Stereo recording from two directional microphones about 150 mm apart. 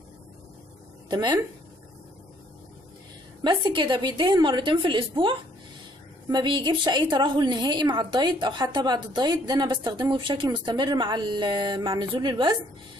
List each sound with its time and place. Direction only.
1.1 s a woman's voice: 25° right (ahead or behind)
3.4 s a woman's voice: 30° right (ahead or behind)
6.3 s a woman's voice: 30° right (ahead or behind)